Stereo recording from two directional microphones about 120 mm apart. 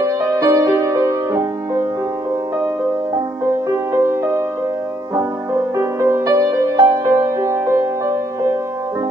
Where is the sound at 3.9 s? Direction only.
25° right (ahead or behind).